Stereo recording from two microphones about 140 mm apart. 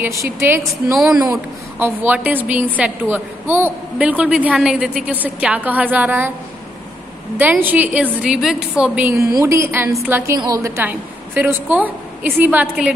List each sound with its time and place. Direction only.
0.0 s a woman's voice: 20° right (ahead or behind)
1.8 s a woman's voice: 15° right (ahead or behind)
7.3 s a woman's voice: 15° right (ahead or behind)
9.1 s a woman's voice: 20° right (ahead or behind)
10.8 s a woman's voice: 15° right (ahead or behind)